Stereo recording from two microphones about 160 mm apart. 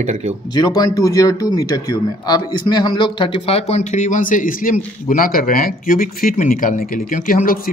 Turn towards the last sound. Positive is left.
turn(degrees=60)  # may be behind; listen again after turning